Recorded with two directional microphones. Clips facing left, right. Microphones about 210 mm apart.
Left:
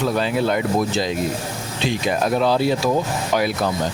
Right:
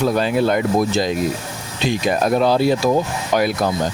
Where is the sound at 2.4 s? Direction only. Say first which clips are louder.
Right 3 dB; 45° right (ahead or behind).